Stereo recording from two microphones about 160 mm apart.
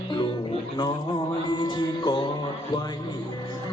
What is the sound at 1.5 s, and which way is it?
Music, 30° left (ahead or behind).